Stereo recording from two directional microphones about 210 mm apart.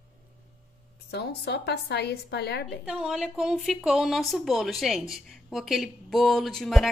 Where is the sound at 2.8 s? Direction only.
5° right (ahead or behind).